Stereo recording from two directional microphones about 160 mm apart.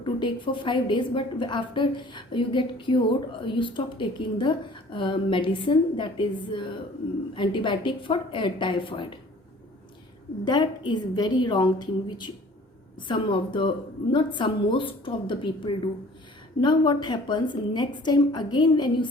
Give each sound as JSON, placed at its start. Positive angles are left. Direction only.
{"t": 0.0, "sound": "a woman's voice", "side_deg": 30}
{"t": 10.4, "sound": "a woman's voice", "side_deg": 30}